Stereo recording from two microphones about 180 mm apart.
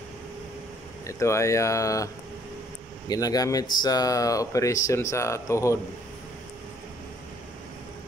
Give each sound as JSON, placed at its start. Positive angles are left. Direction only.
{"t": 1.0, "sound": "speech", "side_deg": 15}
{"t": 3.1, "sound": "speech", "side_deg": 20}